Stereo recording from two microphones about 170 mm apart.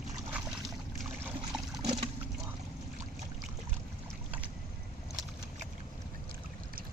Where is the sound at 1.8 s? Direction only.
30° right (ahead or behind).